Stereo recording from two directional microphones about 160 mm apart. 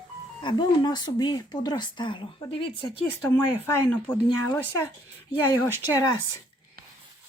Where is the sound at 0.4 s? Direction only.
30° left (ahead or behind).